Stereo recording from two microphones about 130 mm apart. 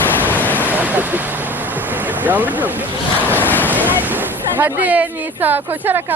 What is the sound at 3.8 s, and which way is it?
Speech, 15° right (ahead or behind).